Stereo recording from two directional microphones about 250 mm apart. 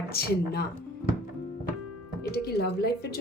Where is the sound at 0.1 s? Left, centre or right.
Left.